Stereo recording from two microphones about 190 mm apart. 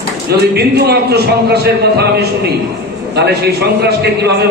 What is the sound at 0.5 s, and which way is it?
A man's voice, 60° right (ahead or behind).